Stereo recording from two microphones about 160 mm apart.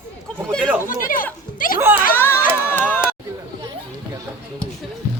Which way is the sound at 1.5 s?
60° left (ahead or behind).